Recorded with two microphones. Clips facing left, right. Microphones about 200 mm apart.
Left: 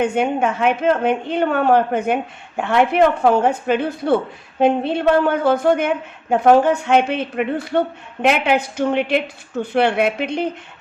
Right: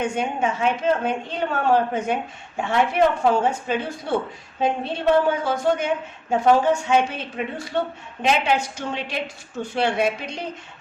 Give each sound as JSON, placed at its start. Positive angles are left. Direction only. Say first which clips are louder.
{"t": 0.0, "sound": "a woman's voice", "louder": "left 6 dB", "side_deg": 60}